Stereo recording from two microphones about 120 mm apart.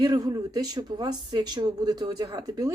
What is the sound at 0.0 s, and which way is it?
Speech, 30° right (ahead or behind).